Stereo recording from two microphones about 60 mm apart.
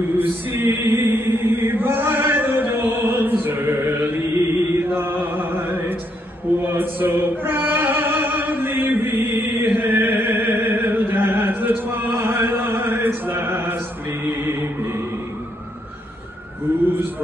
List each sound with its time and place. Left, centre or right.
0.2 s chant: right
14.5 s music: right